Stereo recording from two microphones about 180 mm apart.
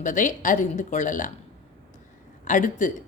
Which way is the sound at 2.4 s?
45° left (ahead or behind).